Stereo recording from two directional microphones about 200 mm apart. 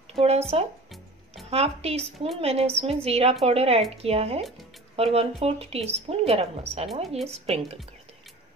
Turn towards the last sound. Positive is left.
turn(degrees=-30)  # may be behind; listen again after turning